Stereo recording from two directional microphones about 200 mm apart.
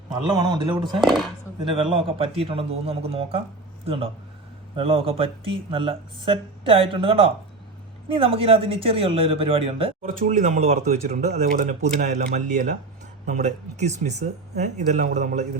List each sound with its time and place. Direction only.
0.1 s speech: 20° right (ahead or behind)
0.9 s speech: centre (ahead or behind)
1.7 s speech: 25° right (ahead or behind)
10.1 s speech: 40° right (ahead or behind)